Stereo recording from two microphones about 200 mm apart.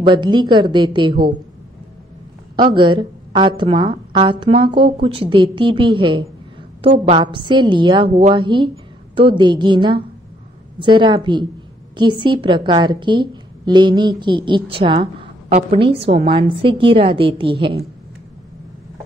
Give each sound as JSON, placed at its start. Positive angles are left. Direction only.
{"t": 0.0, "sound": "a woman's voice", "side_deg": -20}
{"t": 2.7, "sound": "a woman's voice", "side_deg": -25}